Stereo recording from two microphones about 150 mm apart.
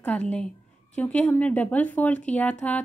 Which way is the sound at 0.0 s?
5° left (ahead or behind).